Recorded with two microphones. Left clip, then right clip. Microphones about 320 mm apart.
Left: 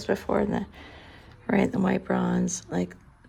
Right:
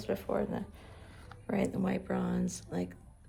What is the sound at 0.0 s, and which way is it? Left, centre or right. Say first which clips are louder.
Speech: left 8 dB; left.